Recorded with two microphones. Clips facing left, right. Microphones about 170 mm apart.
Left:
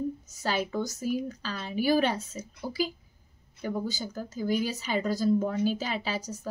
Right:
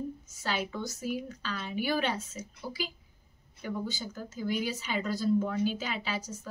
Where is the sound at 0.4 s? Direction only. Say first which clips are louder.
Left 4 dB; 40° left (ahead or behind).